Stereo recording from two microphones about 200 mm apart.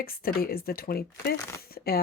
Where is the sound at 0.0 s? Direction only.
50° left (ahead or behind).